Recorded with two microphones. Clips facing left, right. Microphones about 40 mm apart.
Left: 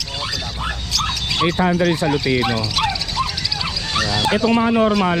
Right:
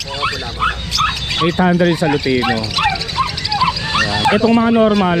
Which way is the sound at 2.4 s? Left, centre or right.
Right.